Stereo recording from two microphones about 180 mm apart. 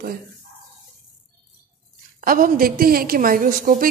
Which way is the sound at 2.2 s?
50° right (ahead or behind).